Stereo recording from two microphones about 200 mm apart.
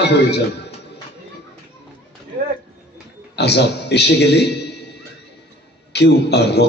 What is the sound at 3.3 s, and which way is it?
Speech, 55° left (ahead or behind).